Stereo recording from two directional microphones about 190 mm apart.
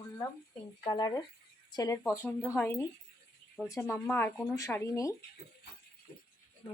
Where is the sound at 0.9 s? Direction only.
20° left (ahead or behind).